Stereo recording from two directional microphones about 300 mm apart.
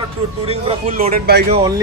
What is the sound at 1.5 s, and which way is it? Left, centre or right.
Speech, centre.